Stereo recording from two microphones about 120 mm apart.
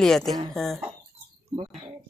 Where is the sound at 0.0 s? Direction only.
5° left (ahead or behind).